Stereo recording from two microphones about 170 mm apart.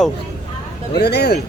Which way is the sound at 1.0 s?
75° left (ahead or behind).